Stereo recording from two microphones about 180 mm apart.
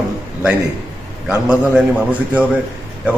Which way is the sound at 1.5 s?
10° right (ahead or behind).